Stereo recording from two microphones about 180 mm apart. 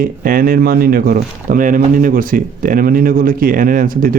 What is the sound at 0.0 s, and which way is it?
Speech, 50° right (ahead or behind).